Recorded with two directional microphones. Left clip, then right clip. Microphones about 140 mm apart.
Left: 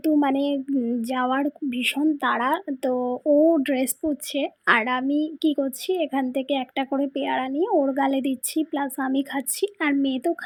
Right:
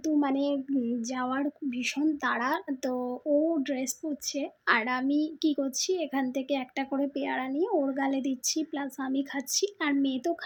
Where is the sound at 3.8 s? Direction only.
25° left (ahead or behind).